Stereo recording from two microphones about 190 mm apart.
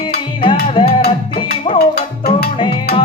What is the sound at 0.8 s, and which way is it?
Music, 25° left (ahead or behind).